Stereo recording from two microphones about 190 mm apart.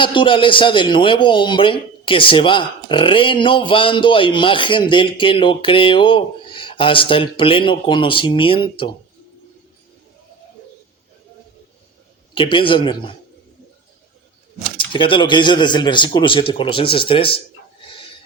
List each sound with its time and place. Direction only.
0.0 s a man's voice: 25° left (ahead or behind)
12.3 s a man's voice: 25° left (ahead or behind)
14.8 s speech: 25° left (ahead or behind)